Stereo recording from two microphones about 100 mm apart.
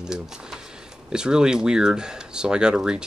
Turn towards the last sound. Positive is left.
turn(degrees=-10)  # may be behind; listen again after turning